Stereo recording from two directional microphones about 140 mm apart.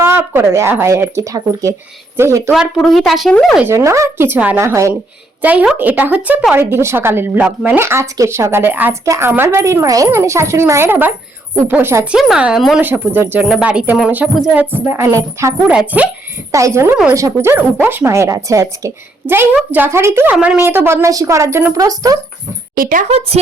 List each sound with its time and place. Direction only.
0.0 s speech: 15° right (ahead or behind)
2.5 s speech: centre (ahead or behind)
3.6 s speech: 20° right (ahead or behind)
5.4 s speech: 10° right (ahead or behind)
12.1 s speech: 5° right (ahead or behind); by 15.7 s 20° right (ahead or behind)
15.7 s speech: 10° right (ahead or behind)
16.5 s speech: 20° right (ahead or behind)
20.3 s speech: 5° right (ahead or behind); by 22.2 s 25° right (ahead or behind)
22.7 s speech: 80° right
23.0 s speech: 45° right (ahead or behind)